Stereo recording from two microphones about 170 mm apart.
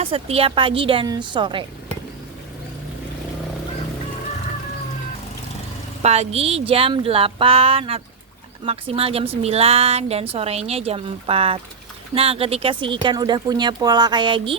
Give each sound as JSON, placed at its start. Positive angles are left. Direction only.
{"t": 0.0, "sound": "speech", "side_deg": -35}
{"t": 6.0, "sound": "speech", "side_deg": -40}